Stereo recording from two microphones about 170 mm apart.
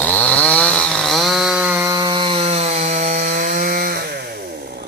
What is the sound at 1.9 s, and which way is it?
Chainsaw, 25° right (ahead or behind).